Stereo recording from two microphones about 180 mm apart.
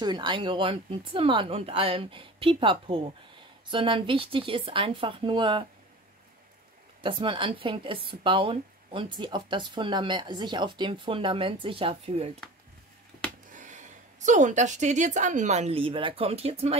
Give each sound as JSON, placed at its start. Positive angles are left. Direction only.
{"t": 0.0, "sound": "speech", "side_deg": -25}
{"t": 7.0, "sound": "speech", "side_deg": -30}
{"t": 13.5, "sound": "a woman's voice", "side_deg": -45}